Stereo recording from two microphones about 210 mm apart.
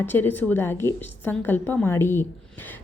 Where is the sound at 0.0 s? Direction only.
10° left (ahead or behind).